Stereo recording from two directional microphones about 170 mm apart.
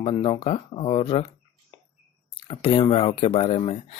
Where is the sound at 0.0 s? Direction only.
35° left (ahead or behind).